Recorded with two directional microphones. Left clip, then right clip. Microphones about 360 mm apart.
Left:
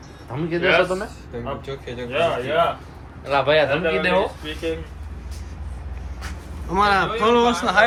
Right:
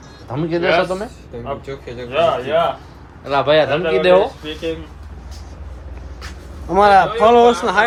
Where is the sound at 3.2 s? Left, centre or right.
Right.